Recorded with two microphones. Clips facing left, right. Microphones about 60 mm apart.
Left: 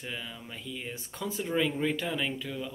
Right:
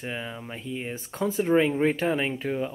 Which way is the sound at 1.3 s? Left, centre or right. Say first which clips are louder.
Right 8 dB; right.